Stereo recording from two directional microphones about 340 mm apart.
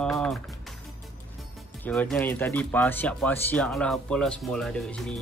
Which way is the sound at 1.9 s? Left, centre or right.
Centre.